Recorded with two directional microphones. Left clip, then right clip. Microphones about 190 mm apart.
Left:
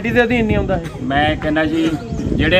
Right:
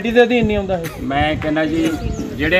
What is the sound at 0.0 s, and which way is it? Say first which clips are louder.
Speech: right 2 dB; 35° right (ahead or behind).